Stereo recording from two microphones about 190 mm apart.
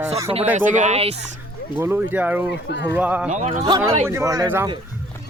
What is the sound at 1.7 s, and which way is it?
Speech, 10° right (ahead or behind).